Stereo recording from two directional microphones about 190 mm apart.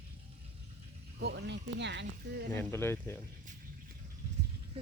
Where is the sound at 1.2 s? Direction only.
65° right (ahead or behind).